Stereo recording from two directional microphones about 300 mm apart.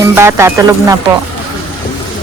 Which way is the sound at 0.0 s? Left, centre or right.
Centre.